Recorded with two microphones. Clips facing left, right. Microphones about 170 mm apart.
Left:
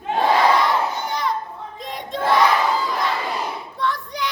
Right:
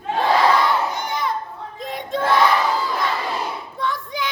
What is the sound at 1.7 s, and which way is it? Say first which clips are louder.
Crowd: right 4 dB; centre (ahead or behind).